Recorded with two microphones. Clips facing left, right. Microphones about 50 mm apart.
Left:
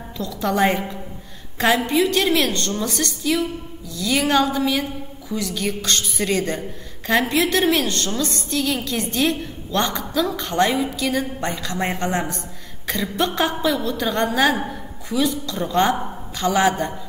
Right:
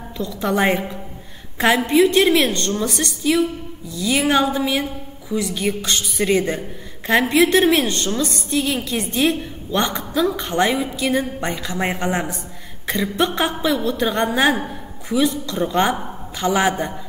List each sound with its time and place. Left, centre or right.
0.2 s a woman's voice: centre
2.0 s a woman's voice: centre